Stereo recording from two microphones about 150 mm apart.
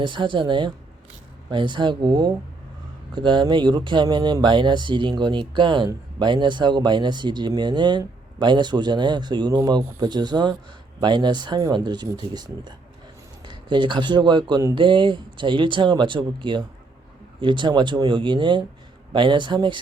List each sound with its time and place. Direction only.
0.0 s speech: 30° right (ahead or behind)